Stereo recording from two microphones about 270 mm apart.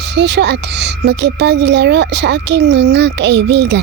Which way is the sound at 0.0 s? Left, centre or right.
Right.